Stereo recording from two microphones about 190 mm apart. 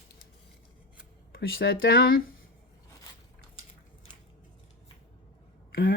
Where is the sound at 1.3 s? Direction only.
55° left (ahead or behind).